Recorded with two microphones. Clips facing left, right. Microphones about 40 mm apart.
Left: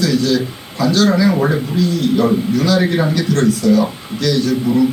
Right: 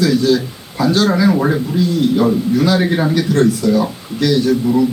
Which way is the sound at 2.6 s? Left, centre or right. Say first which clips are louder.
Even; centre.